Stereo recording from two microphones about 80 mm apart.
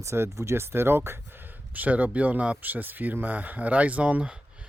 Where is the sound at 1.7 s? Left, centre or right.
Centre.